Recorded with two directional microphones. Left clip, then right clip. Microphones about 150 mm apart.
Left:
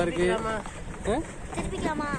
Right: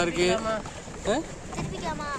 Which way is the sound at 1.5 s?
55° left (ahead or behind).